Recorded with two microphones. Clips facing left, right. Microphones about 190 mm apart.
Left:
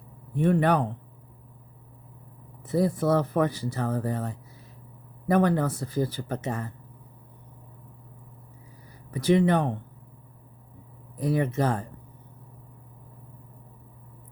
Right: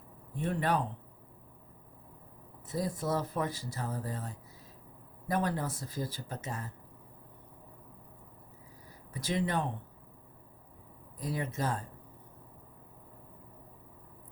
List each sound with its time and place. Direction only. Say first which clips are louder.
0.3 s speech: left 9 dB; 65° left (ahead or behind)
2.6 s speech: left 10 dB; 65° left (ahead or behind)
9.1 s speech: left 11 dB; 65° left (ahead or behind)
11.2 s speech: left 10 dB; 65° left (ahead or behind)